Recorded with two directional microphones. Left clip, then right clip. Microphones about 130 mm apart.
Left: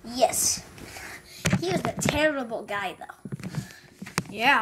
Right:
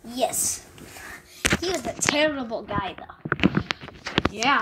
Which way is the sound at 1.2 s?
Centre (ahead or behind).